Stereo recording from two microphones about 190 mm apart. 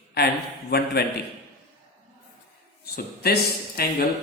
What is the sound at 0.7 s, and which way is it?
Speech, 55° left (ahead or behind).